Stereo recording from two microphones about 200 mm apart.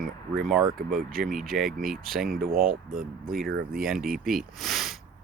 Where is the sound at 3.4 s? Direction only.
50° right (ahead or behind).